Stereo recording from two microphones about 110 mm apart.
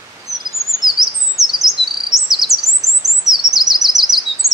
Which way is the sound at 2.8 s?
30° right (ahead or behind).